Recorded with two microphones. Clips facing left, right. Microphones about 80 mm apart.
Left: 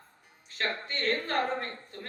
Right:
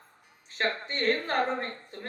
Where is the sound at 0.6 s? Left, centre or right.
Right.